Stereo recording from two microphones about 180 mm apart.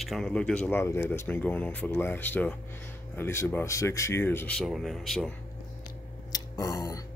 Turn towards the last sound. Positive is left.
turn(degrees=20)  # may be behind; listen again after turning